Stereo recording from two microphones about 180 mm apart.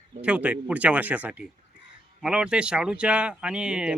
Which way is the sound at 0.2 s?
5° right (ahead or behind).